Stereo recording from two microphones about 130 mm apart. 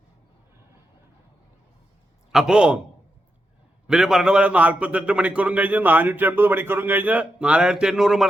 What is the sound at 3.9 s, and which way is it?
A man's voice, 5° right (ahead or behind).